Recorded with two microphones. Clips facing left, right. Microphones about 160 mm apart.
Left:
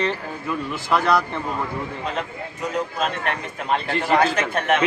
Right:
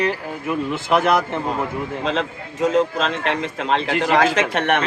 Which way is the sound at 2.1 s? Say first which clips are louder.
Right 4 dB; 90° right.